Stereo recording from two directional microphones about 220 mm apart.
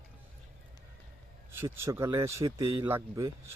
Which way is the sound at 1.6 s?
15° right (ahead or behind).